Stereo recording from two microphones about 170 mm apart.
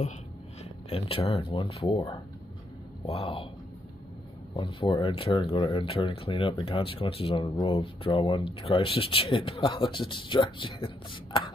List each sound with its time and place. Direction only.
0.8 s speech: 35° left (ahead or behind)
4.6 s speech: 30° left (ahead or behind)